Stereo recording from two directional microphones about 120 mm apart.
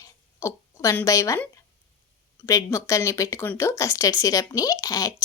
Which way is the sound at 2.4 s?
25° left (ahead or behind).